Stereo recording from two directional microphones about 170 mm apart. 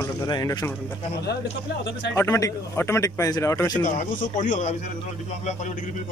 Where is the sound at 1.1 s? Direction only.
75° left (ahead or behind).